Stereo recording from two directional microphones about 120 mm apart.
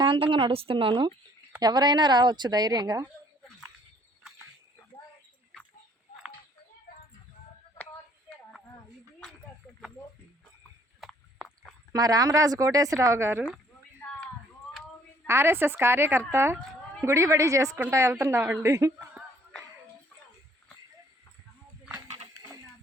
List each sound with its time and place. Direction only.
0.0 s a woman's voice: 45° right (ahead or behind)
11.0 s a sound: centre (ahead or behind)
11.9 s speech: 30° right (ahead or behind)
15.3 s speech: 20° right (ahead or behind)